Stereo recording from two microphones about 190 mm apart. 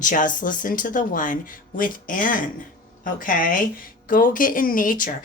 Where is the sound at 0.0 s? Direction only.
45° left (ahead or behind).